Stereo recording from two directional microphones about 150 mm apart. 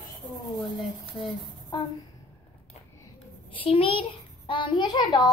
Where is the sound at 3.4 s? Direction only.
35° left (ahead or behind).